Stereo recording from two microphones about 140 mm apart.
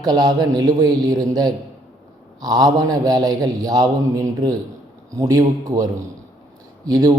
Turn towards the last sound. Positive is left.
turn(degrees=-25)  # may be behind; listen again after turning